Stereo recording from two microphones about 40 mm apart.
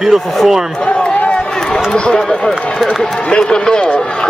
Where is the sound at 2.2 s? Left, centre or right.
Centre.